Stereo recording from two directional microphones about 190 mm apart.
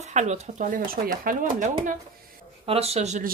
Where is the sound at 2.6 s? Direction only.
30° right (ahead or behind).